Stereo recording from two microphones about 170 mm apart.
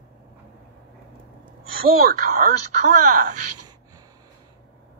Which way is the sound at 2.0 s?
60° right (ahead or behind).